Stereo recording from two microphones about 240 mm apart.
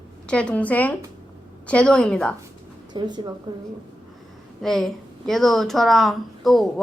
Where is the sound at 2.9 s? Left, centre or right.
Centre.